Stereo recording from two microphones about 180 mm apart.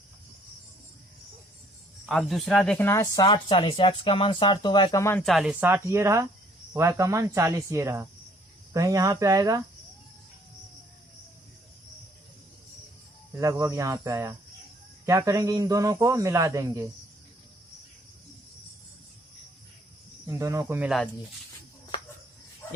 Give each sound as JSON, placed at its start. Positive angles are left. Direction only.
{"t": 2.0, "sound": "speech", "side_deg": 0}
{"t": 5.2, "sound": "a man's voice", "side_deg": 0}
{"t": 13.3, "sound": "a man's voice", "side_deg": -15}
{"t": 20.2, "sound": "a man's voice", "side_deg": -15}
{"t": 21.9, "sound": "cricket", "side_deg": 25}